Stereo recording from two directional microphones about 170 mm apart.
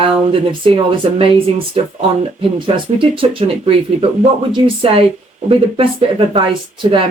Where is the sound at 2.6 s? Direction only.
30° right (ahead or behind).